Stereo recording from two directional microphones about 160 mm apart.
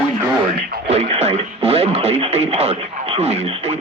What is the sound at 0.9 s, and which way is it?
Speech, 40° right (ahead or behind).